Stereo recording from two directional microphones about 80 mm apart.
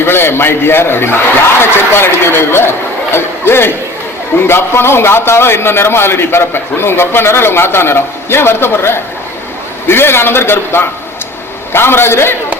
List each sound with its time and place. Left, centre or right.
0.0 s a man's voice: left